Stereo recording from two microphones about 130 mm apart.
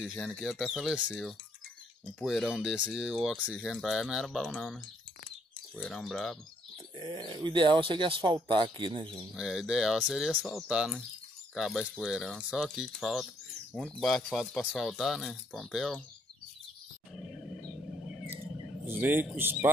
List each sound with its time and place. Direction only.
0.0 s speech: 5° left (ahead or behind)
5.8 s speech: centre (ahead or behind)
7.0 s speech: 40° right (ahead or behind)
9.3 s speech: centre (ahead or behind)
18.9 s speech: 15° right (ahead or behind)